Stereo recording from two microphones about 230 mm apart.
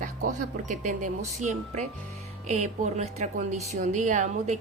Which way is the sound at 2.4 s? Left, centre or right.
Right.